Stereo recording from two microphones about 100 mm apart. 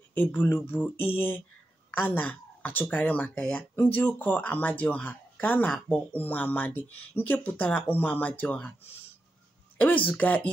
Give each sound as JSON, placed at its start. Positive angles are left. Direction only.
{"t": 0.1, "sound": "mantra", "side_deg": 15}
{"t": 1.9, "sound": "speech", "side_deg": 20}
{"t": 9.8, "sound": "speech", "side_deg": 15}